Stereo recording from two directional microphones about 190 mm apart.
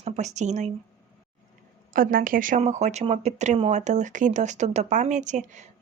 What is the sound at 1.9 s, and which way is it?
A woman's voice, 45° right (ahead or behind).